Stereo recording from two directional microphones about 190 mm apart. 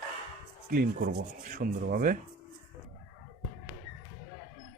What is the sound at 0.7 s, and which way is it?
Speech, 50° right (ahead or behind).